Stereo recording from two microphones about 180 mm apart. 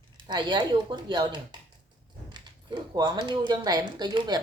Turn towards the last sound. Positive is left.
turn(degrees=-25)  # may be behind; listen again after turning